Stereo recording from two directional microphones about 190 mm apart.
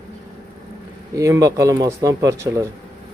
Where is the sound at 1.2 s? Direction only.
15° right (ahead or behind).